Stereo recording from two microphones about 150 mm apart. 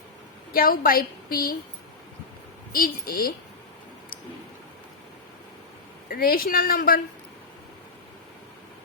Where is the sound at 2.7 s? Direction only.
85° left.